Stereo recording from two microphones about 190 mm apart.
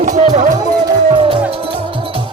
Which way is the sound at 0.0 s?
40° right (ahead or behind).